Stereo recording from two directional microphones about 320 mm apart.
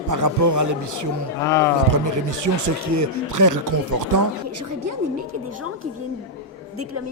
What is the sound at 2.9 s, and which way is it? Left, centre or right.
Speech, right.